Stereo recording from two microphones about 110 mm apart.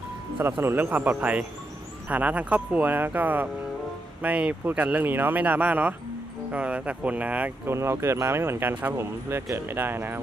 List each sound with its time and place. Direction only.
0.4 s speech: 20° right (ahead or behind)